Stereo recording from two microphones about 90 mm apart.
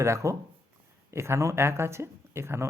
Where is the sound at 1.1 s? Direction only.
30° right (ahead or behind).